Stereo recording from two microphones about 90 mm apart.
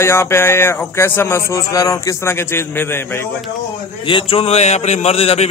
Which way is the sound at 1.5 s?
40° left (ahead or behind).